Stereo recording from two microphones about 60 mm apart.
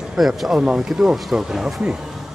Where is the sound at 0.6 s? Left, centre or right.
Centre.